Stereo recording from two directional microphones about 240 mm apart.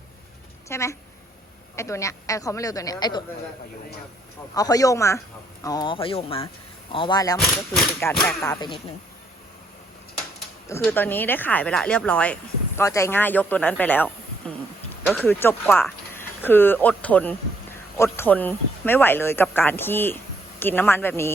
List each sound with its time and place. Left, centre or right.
0.7 s speech: centre
4.5 s speech: centre
8.1 s a sound: centre
8.4 s speech: centre
10.8 s speech: centre